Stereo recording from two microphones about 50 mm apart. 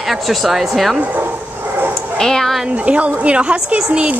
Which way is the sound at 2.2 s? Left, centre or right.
Centre.